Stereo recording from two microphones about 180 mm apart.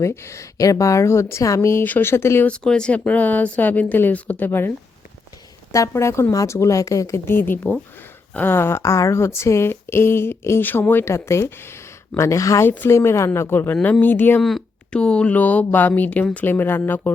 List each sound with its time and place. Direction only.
0.0 s speech: 15° left (ahead or behind)
5.7 s speech: 15° left (ahead or behind)